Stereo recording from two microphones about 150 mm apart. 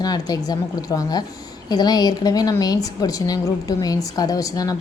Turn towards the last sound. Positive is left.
turn(degrees=25)  # may be behind; listen again after turning